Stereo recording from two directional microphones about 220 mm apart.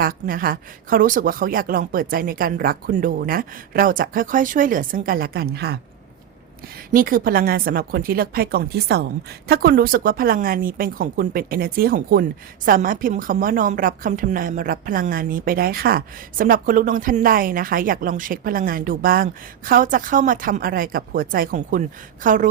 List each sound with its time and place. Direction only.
0.0 s a woman's voice: 40° right (ahead or behind)
6.9 s a woman's voice: 40° right (ahead or behind)